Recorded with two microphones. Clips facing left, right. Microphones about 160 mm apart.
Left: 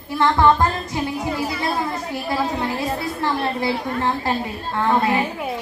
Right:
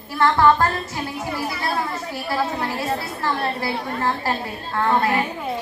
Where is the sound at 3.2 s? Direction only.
20° left (ahead or behind).